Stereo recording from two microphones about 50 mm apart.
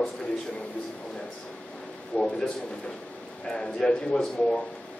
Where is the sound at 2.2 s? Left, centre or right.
Left.